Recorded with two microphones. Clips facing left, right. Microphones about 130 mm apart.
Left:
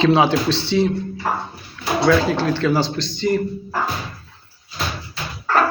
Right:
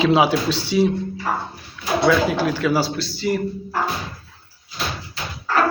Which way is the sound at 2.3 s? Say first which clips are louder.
Left 1 dB; 10° right (ahead or behind).